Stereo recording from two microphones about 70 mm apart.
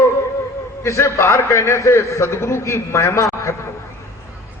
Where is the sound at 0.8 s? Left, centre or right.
Left.